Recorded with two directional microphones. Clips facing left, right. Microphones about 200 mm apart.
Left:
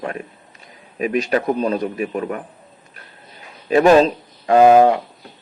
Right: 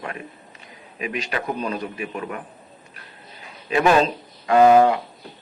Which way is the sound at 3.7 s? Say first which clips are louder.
Left 6 dB; 40° left (ahead or behind).